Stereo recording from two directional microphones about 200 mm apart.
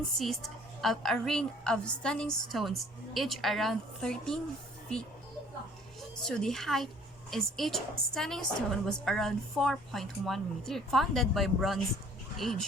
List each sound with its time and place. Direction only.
0.2 s a woman's voice: centre (ahead or behind)
6.0 s a woman's voice: 5° left (ahead or behind)